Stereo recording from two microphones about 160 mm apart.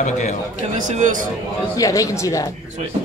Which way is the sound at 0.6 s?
50° right (ahead or behind).